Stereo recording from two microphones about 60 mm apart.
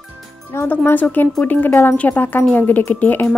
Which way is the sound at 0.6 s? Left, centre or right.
Left.